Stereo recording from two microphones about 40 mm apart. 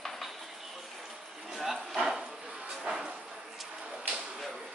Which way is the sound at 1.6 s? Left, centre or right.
Centre.